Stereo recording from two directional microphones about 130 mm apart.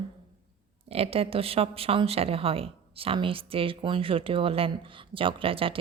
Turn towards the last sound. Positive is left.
turn(degrees=-45)  # may be behind; listen again after turning